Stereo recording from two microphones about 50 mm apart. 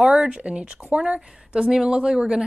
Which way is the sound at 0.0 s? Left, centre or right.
Centre.